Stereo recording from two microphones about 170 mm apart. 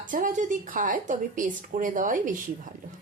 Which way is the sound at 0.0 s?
50° right (ahead or behind).